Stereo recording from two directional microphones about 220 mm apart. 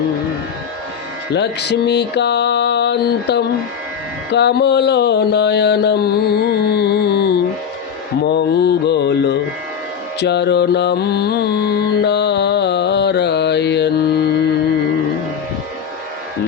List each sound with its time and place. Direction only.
1.3 s mantra: 50° left (ahead or behind)
10.2 s music: 50° left (ahead or behind)